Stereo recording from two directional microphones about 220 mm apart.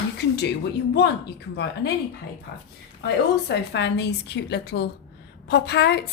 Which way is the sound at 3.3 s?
50° left (ahead or behind).